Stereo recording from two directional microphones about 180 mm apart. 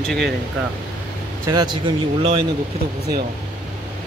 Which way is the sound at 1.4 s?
25° right (ahead or behind).